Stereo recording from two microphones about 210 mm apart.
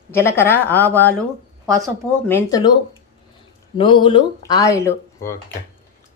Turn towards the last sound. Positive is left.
turn(degrees=15)  # may be behind; listen again after turning